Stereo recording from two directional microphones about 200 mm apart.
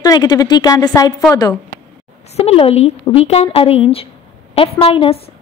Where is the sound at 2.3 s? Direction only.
30° left (ahead or behind).